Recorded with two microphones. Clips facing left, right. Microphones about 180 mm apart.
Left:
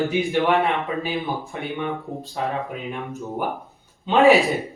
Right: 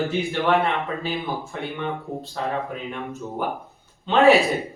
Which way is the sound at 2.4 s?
15° left (ahead or behind).